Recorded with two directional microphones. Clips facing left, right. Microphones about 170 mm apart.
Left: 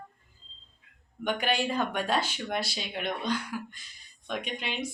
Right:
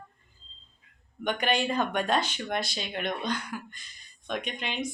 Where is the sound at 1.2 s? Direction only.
5° left (ahead or behind).